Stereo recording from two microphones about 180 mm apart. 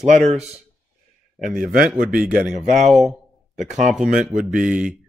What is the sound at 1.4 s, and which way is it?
Speech, 50° right (ahead or behind).